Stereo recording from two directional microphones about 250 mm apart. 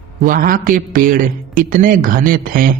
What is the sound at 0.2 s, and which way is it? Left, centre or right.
A man's voice, right.